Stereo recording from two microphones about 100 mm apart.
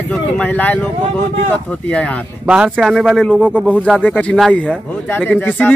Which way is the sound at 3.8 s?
10° left (ahead or behind).